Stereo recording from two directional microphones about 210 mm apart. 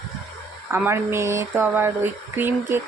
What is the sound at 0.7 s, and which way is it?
Speech, 10° right (ahead or behind).